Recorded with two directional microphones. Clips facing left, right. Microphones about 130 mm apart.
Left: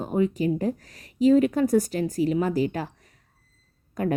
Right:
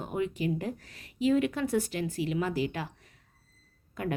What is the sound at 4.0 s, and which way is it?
Speech, 40° left (ahead or behind).